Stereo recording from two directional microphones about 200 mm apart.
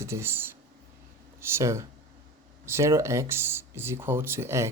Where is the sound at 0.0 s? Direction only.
15° right (ahead or behind).